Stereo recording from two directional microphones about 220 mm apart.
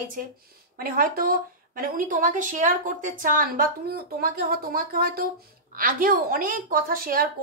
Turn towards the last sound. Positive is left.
turn(degrees=-40)  # may be behind; listen again after turning